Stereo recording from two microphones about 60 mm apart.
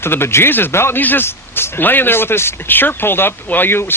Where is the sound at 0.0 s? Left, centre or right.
Left.